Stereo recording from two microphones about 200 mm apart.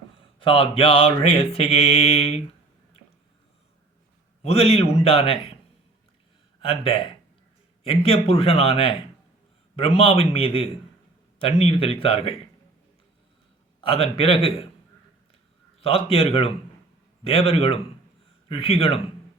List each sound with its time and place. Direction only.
0.3 s mantra: 25° left (ahead or behind)
4.4 s mantra: 30° left (ahead or behind)
6.6 s speech: 30° left (ahead or behind)
7.9 s mantra: 30° left (ahead or behind)
13.8 s mantra: 30° left (ahead or behind)
15.8 s mantra: 30° left (ahead or behind)